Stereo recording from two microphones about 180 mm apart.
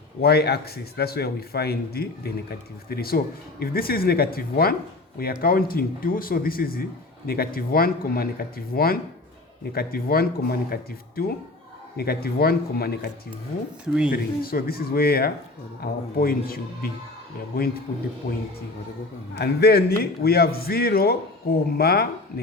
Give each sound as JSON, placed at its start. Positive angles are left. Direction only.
{"t": 0.2, "sound": "speech", "side_deg": 60}
{"t": 13.8, "sound": "speech", "side_deg": -5}
{"t": 14.1, "sound": "speech", "side_deg": 55}
{"t": 19.4, "sound": "speech", "side_deg": 65}